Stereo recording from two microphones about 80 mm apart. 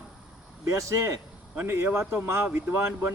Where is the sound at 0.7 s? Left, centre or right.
Right.